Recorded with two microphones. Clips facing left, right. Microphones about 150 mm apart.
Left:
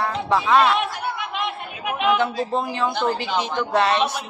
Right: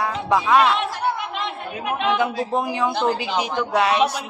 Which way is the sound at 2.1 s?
10° right (ahead or behind).